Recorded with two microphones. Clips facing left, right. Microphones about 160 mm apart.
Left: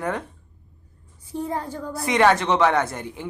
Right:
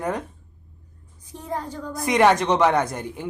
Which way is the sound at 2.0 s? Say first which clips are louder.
Right 1 dB; 15° right (ahead or behind).